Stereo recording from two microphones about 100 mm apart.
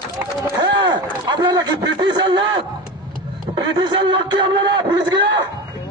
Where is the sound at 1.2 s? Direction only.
45° right (ahead or behind).